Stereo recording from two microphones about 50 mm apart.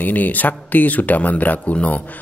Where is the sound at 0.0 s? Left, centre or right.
Left.